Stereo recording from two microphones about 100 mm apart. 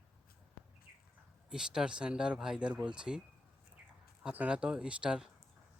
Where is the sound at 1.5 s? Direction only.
5° right (ahead or behind).